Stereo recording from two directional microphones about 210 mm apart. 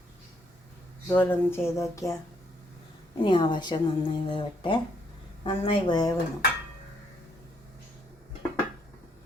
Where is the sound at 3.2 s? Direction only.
20° left (ahead or behind).